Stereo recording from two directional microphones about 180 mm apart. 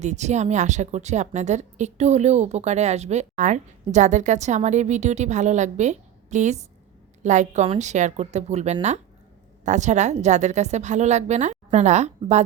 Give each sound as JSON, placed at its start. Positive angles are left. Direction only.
{"t": 0.0, "sound": "a woman's voice", "side_deg": -40}